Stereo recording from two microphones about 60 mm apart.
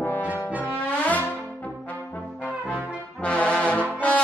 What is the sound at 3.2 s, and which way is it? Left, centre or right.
Brass instrument, left.